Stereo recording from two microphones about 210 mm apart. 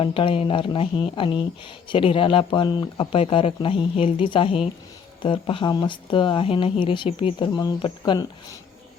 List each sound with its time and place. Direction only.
0.0 s speech: 25° left (ahead or behind)